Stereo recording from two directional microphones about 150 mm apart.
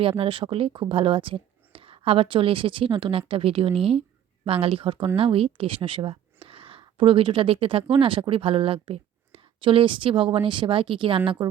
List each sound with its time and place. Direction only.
0.0 s speech: 35° right (ahead or behind)